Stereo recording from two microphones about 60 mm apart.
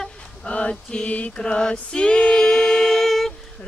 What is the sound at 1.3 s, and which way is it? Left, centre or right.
Singing, centre.